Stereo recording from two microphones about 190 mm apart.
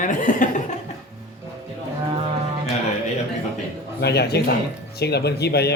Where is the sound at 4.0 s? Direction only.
60° left (ahead or behind).